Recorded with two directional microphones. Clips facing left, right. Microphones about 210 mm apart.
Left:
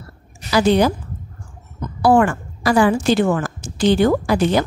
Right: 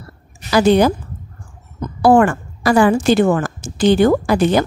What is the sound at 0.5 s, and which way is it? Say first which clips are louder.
Speech: right 3 dB; 50° right (ahead or behind).